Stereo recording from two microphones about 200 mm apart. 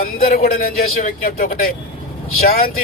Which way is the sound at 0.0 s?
45° left (ahead or behind).